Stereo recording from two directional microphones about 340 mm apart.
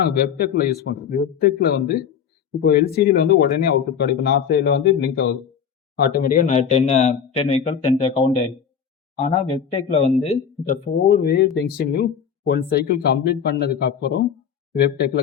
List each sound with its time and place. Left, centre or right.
0.1 s speech: left